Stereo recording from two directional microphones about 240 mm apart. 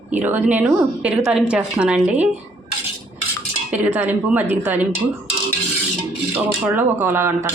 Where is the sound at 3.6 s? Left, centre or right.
Centre.